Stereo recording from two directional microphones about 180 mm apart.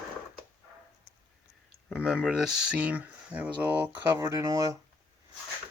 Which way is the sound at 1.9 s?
5° right (ahead or behind).